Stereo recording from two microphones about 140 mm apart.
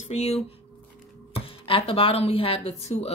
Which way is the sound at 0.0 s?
50° left (ahead or behind).